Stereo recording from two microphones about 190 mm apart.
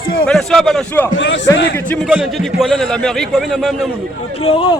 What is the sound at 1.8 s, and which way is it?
A man's voice, 5° left (ahead or behind).